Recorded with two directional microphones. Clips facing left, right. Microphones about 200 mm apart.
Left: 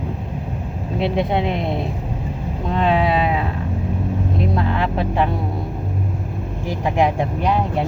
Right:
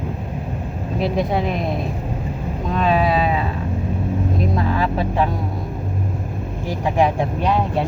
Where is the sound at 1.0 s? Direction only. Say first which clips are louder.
Left 1 dB; 25° left (ahead or behind).